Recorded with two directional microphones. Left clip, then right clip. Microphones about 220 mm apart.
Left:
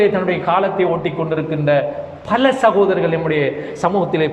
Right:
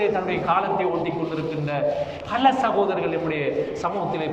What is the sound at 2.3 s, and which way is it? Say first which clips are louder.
A man's voice: left 6 dB; 35° left (ahead or behind).